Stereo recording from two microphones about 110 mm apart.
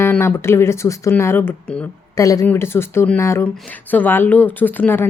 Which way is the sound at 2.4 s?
20° left (ahead or behind).